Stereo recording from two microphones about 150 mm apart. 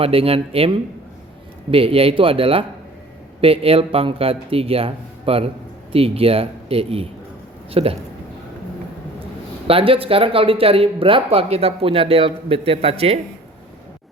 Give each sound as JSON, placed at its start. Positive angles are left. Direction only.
{"t": 0.0, "sound": "speech", "side_deg": -40}
{"t": 9.6, "sound": "speech", "side_deg": -40}